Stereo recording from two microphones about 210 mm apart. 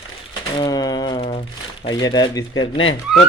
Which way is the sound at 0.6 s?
20° left (ahead or behind).